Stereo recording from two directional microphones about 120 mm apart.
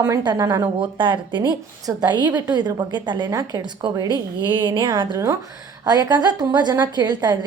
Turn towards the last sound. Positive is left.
turn(degrees=-35)  # may be behind; listen again after turning